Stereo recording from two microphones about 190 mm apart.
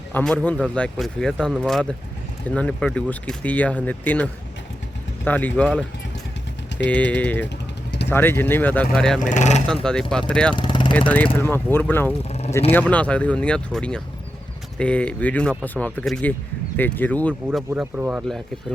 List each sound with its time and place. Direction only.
0.1 s speech: 5° left (ahead or behind)
6.9 s speech: 10° left (ahead or behind)
9.1 s speech: 40° left (ahead or behind)
9.8 s speech: 5° left (ahead or behind)
10.5 s vehicle: 25° left (ahead or behind)
11.3 s speech: 10° left (ahead or behind)
17.7 s speech: 5° right (ahead or behind)